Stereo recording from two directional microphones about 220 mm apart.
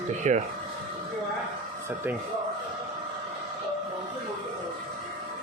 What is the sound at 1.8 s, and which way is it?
Speech, 10° right (ahead or behind).